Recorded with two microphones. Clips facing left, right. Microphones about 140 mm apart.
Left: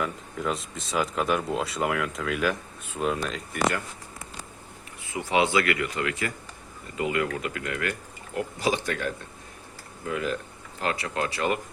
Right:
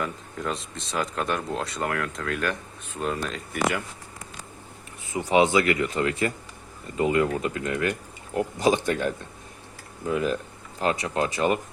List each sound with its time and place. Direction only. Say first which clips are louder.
0.0 s speech: left 1 dB; centre (ahead or behind)
5.2 s speech: right 3 dB; 20° right (ahead or behind)